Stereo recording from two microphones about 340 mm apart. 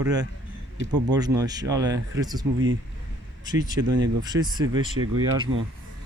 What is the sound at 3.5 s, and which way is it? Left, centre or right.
Speech, centre.